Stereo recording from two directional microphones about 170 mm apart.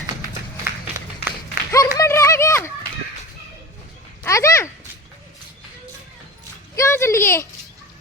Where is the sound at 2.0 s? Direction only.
20° left (ahead or behind).